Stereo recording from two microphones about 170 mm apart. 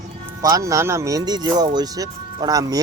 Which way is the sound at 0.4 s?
20° right (ahead or behind).